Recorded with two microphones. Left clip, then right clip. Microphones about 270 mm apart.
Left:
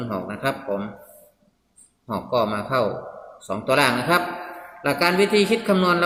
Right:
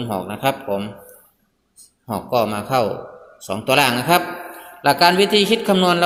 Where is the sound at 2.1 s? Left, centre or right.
Centre.